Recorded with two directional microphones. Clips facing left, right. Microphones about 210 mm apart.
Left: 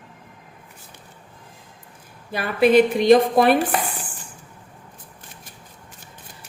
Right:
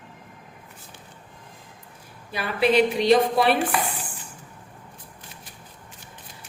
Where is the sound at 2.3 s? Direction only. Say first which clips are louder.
Left 5 dB; 50° left (ahead or behind).